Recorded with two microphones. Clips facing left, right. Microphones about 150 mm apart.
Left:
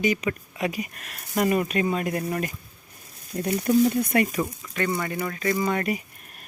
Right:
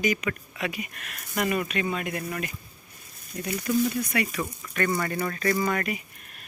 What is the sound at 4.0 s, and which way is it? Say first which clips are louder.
Speech: left 5 dB; 50° left (ahead or behind).